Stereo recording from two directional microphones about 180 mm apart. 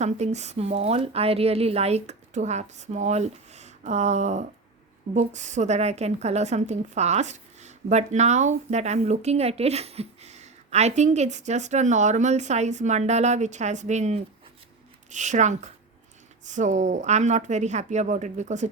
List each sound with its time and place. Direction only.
0.0 s a woman's voice: 40° right (ahead or behind)